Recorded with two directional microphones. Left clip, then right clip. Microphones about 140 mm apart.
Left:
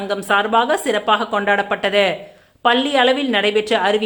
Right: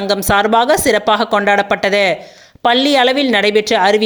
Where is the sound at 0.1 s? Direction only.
40° right (ahead or behind).